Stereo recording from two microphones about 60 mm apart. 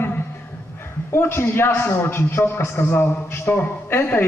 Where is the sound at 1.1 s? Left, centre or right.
Left.